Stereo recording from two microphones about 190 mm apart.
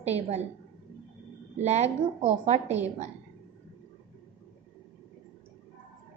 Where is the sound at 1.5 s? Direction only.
35° right (ahead or behind).